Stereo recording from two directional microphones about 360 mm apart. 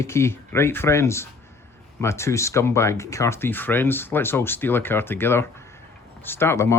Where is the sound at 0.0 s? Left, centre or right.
Centre.